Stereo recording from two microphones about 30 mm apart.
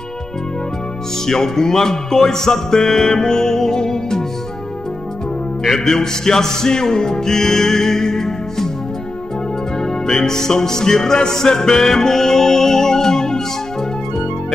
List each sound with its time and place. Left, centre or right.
1.2 s music: centre
5.6 s music: centre
10.0 s music: centre